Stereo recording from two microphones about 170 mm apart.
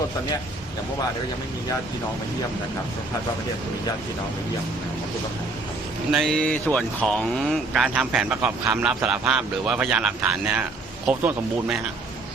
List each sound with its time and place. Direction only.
6.1 s a man's voice: centre (ahead or behind)